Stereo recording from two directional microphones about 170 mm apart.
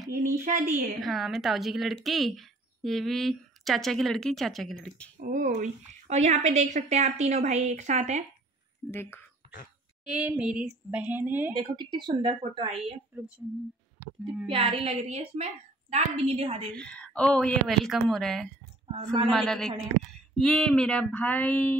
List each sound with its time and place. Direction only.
0.1 s a woman's voice: 55° right (ahead or behind)
0.9 s speech: centre (ahead or behind)
5.2 s a woman's voice: 50° right (ahead or behind)
8.9 s speech: 15° left (ahead or behind)
10.0 s a woman's voice: 5° right (ahead or behind)
11.5 s a woman's voice: 25° right (ahead or behind)
13.1 s a woman's voice: 10° right (ahead or behind)
14.5 s a woman's voice: 35° right (ahead or behind)
16.7 s speech: 5° left (ahead or behind)